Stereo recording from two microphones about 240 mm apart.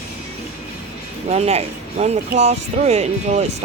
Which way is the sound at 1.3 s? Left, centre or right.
Right.